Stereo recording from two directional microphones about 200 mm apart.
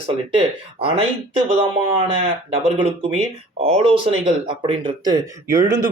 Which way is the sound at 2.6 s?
30° right (ahead or behind).